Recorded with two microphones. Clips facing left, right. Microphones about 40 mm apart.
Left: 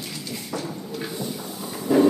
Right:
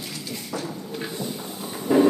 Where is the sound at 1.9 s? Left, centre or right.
Right.